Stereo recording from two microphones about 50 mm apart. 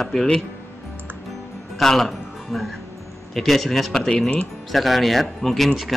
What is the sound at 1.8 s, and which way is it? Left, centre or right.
Speech, centre.